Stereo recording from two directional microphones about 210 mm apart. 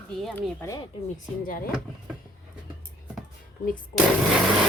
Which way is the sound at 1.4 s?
40° left (ahead or behind).